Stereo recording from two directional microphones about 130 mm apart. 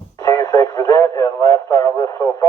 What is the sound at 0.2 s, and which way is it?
Radio, 20° left (ahead or behind).